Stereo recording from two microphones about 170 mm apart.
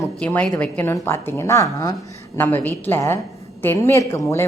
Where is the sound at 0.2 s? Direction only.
5° left (ahead or behind).